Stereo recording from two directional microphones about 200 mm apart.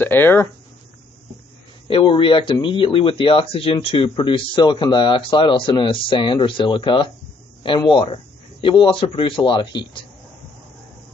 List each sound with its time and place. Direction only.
0.0 s speech: 10° left (ahead or behind)
1.9 s speech: 25° left (ahead or behind)